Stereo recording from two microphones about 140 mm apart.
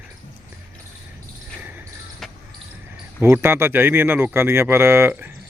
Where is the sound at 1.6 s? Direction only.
15° right (ahead or behind).